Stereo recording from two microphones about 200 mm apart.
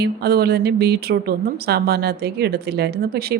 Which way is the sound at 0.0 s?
55° right (ahead or behind).